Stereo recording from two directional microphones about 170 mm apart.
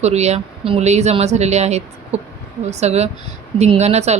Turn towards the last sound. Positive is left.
turn(degrees=-40)  # may be behind; listen again after turning